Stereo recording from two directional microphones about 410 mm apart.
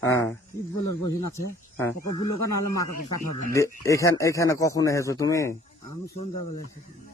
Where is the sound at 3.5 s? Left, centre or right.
Centre.